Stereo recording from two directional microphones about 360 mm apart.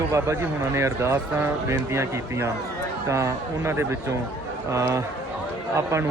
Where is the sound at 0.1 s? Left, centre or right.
Centre.